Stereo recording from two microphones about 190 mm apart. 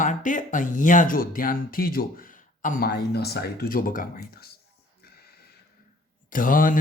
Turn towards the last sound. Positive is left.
turn(degrees=45)  # may be behind; listen again after turning